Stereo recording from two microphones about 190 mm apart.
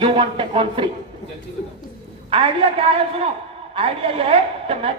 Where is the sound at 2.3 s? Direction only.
30° right (ahead or behind).